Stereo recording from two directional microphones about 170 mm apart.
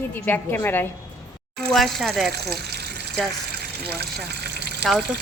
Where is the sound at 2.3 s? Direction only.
70° right (ahead or behind).